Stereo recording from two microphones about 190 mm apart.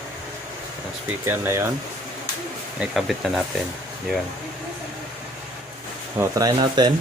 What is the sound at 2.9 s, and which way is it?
Speech, centre (ahead or behind).